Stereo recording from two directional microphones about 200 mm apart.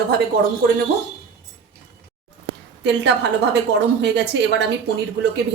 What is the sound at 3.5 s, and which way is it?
Speech, 60° right (ahead or behind).